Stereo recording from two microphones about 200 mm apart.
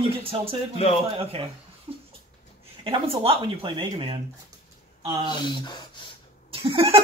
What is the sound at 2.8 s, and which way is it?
Speech, 30° right (ahead or behind).